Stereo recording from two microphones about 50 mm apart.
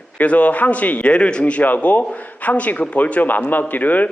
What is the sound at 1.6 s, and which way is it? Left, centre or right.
Speech, left.